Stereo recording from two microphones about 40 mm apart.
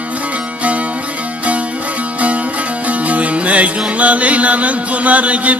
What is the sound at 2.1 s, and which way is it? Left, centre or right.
Music, right.